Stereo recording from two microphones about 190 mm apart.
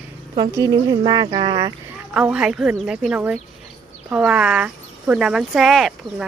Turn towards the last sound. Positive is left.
turn(degrees=0)  # may be behind; listen again after turning